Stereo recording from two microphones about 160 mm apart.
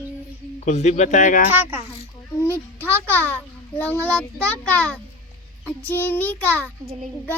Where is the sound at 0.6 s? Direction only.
45° left (ahead or behind).